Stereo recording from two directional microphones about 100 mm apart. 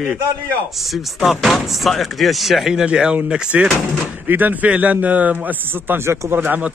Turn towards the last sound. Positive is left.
turn(degrees=-20)  # may be behind; listen again after turning